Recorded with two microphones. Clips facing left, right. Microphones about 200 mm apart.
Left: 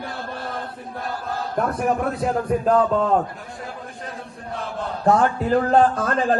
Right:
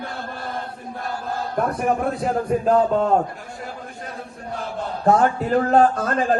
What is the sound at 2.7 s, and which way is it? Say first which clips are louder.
Speech: right 1 dB; 35° right (ahead or behind).